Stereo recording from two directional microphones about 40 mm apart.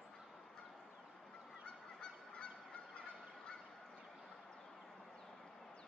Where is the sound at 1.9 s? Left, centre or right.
Left.